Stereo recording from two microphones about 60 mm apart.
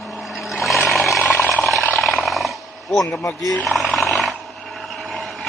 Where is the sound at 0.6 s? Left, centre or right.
Centre.